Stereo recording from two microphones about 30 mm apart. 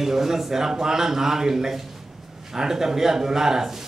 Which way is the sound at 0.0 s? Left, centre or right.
Centre.